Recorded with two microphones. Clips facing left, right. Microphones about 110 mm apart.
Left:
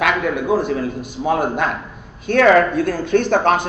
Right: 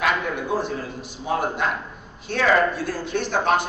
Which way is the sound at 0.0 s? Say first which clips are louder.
Left 5 dB; 65° left (ahead or behind).